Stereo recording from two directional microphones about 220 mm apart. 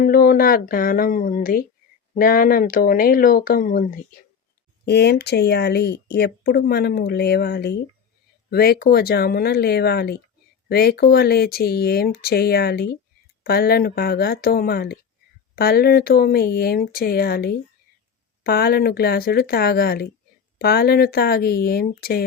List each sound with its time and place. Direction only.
0.0 s speech: 40° left (ahead or behind)
4.9 s speech: 50° left (ahead or behind)